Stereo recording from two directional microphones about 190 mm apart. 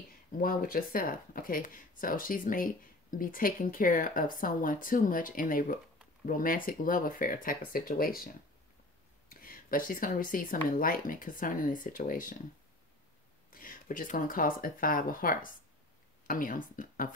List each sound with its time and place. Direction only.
0.4 s speech: 50° left (ahead or behind)
9.3 s speech: 50° left (ahead or behind)
13.5 s speech: 45° left (ahead or behind)